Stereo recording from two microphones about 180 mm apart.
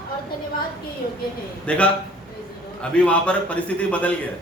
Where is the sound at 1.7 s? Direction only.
5° left (ahead or behind).